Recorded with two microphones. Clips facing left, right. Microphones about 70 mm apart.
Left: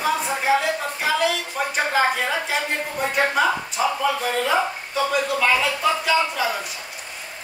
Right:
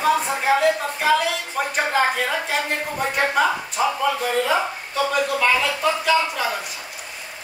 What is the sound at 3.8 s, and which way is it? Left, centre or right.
Speech, centre.